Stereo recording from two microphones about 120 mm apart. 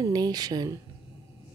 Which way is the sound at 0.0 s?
35° right (ahead or behind).